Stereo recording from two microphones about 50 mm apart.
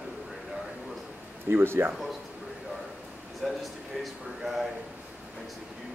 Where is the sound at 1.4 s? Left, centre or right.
Right.